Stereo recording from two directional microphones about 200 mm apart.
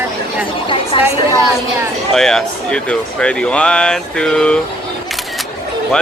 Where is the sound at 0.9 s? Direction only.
25° left (ahead or behind).